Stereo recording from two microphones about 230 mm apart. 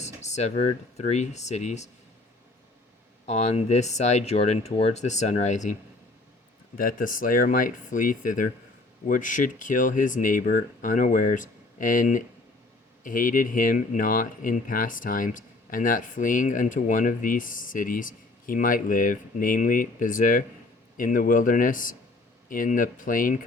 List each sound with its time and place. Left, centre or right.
0.0 s speech: left
3.2 s speech: left
6.7 s speech: left